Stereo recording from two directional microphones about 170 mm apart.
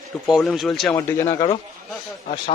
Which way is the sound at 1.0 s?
15° left (ahead or behind).